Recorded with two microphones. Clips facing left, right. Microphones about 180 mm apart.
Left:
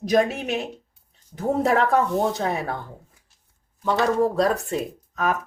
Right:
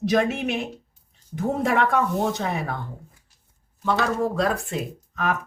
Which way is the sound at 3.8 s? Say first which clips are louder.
Left 3 dB; 35° left (ahead or behind).